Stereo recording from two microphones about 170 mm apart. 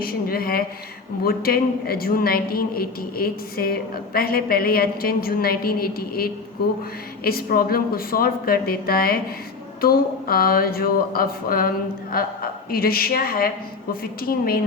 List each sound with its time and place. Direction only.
0.0 s a woman's voice: 60° left (ahead or behind)